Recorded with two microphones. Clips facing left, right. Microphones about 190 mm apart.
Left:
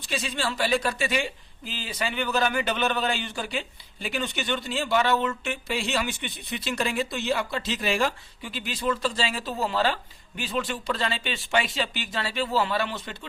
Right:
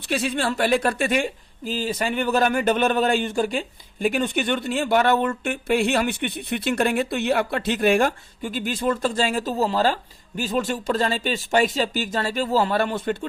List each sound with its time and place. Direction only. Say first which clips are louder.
0.0 s speech: right 6 dB; 60° right (ahead or behind)